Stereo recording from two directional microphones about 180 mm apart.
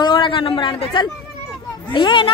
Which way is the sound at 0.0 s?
25° left (ahead or behind).